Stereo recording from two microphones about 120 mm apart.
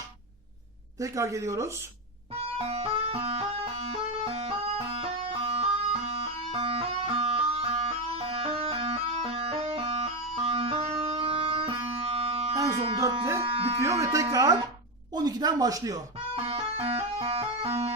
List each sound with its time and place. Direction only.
0.9 s speech: 25° right (ahead or behind)
2.6 s music: 55° right (ahead or behind)
13.0 s electric shaver: 25° right (ahead or behind)
13.4 s electric shaver: 55° right (ahead or behind)
13.7 s music: 25° right (ahead or behind)
15.1 s speech: 35° right (ahead or behind)
16.3 s music: 55° right (ahead or behind)